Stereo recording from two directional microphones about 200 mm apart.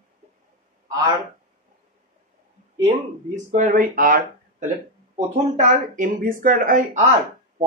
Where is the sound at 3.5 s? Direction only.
40° right (ahead or behind).